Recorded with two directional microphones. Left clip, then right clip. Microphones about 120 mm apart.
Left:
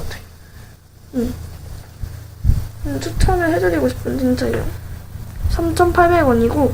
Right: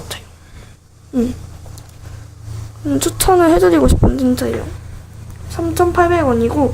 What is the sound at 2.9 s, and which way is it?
Speech, 90° right.